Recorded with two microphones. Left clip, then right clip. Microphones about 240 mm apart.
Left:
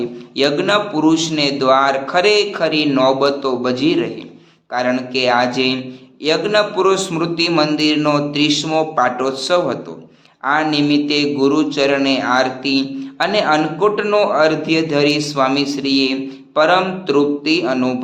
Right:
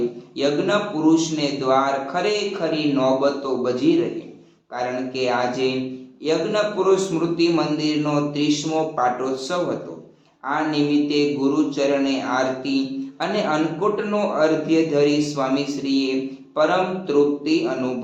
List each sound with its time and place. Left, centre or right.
0.3 s a man's voice: left
17.1 s a man's voice: left